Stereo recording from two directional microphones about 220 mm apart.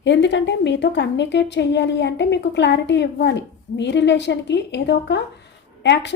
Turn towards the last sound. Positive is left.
turn(degrees=50)  # may be behind; listen again after turning